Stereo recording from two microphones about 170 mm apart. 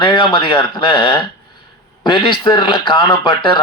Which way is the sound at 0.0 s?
30° left (ahead or behind).